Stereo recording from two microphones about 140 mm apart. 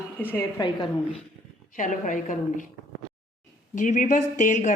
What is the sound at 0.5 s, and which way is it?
Speech, 35° left (ahead or behind).